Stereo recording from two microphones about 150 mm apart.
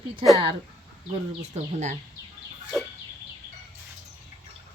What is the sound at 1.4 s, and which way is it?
Speech, 50° right (ahead or behind).